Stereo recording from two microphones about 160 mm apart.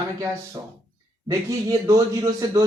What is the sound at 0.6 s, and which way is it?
A man's voice, 25° right (ahead or behind).